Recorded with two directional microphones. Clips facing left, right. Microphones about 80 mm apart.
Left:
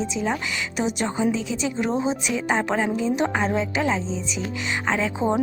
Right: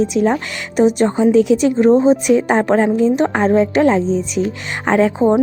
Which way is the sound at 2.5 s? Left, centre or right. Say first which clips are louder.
Right 9 dB; right.